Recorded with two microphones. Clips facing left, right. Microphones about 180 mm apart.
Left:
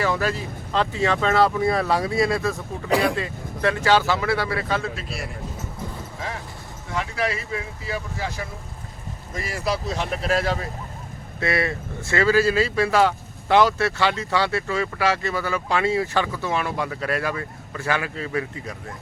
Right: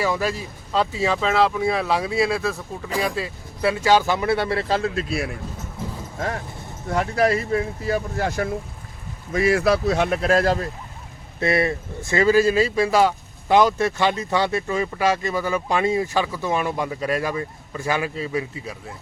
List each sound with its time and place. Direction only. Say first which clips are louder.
0.0 s speech: even; 10° right (ahead or behind); by 4.8 s 30° right (ahead or behind)
6.1 s speech: right 8 dB; 50° right (ahead or behind)
11.3 s speech: right 3 dB; 20° right (ahead or behind)